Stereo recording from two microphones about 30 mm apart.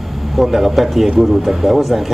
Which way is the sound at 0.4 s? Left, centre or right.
Centre.